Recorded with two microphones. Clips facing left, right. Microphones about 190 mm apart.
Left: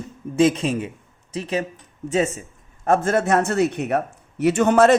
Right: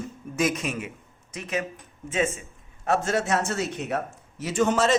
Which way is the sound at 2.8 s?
50° left (ahead or behind).